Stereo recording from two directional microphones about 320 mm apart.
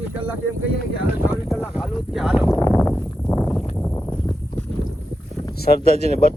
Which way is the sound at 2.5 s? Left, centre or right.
Centre.